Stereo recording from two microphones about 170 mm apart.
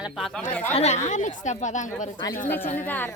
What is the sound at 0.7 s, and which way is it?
A woman's voice, 40° left (ahead or behind).